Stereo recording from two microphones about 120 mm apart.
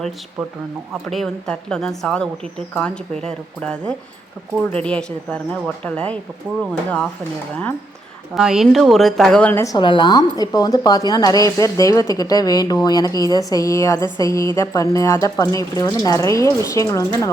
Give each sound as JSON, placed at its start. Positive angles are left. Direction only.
{"t": 1.1, "sound": "speech", "side_deg": 5}
{"t": 8.4, "sound": "speech", "side_deg": -5}
{"t": 9.5, "sound": "speech", "side_deg": 20}
{"t": 9.7, "sound": "a woman's voice", "side_deg": 40}